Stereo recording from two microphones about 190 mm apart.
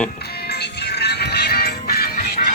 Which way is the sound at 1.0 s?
60° left (ahead or behind).